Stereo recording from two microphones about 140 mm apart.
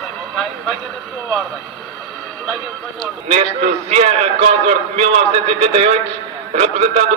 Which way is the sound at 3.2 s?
50° right (ahead or behind).